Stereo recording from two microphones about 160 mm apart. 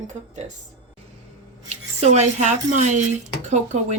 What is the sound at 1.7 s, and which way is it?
Speech, 45° right (ahead or behind).